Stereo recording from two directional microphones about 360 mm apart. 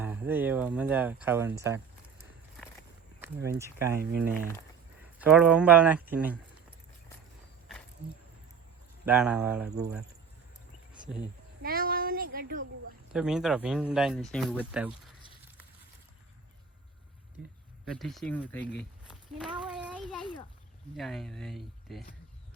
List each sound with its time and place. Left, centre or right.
0.0 s speech: centre
3.4 s speech: centre
5.2 s speech: centre
9.0 s speech: centre
11.6 s a sound: right
13.1 s speech: centre
17.8 s a child's voice: centre